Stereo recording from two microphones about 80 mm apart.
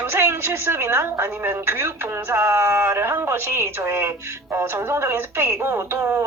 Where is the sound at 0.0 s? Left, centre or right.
Right.